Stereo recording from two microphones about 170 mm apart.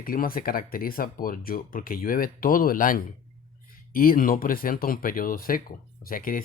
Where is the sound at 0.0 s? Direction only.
55° left (ahead or behind).